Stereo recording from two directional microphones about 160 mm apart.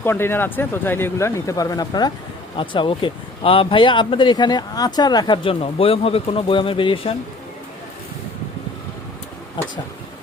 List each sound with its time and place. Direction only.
0.0 s speech: 15° left (ahead or behind); by 7.2 s 35° left (ahead or behind)